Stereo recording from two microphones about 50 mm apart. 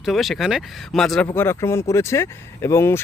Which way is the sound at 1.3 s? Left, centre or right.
Left.